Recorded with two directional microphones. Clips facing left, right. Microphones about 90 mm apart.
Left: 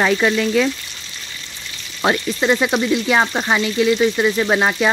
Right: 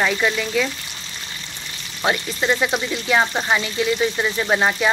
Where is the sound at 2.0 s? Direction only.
20° left (ahead or behind).